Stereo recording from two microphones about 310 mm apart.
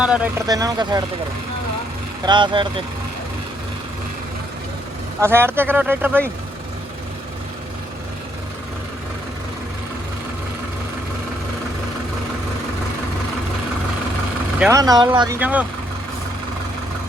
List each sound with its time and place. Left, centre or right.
0.0 s speech: centre
2.2 s speech: centre
5.2 s speech: centre
14.6 s speech: centre